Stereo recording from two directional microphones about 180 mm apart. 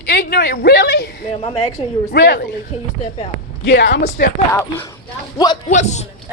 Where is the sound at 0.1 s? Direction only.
65° left (ahead or behind).